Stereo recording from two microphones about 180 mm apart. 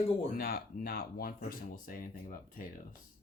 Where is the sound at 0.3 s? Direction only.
55° left (ahead or behind).